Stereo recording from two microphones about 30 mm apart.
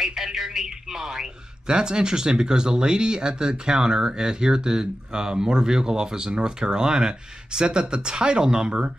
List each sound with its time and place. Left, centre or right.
0.0 s speech: centre
1.2 s speech: right